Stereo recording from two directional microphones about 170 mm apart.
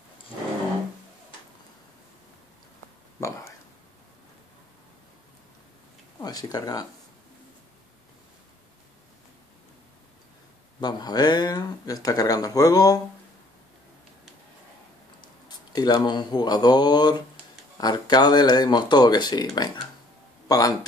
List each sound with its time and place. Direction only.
6.2 s speech: 20° left (ahead or behind)
10.8 s speech: 25° left (ahead or behind)
15.4 s speech: 25° left (ahead or behind)